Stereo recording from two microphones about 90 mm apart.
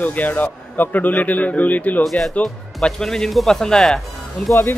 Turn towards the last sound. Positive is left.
turn(degrees=30)  # may be behind; listen again after turning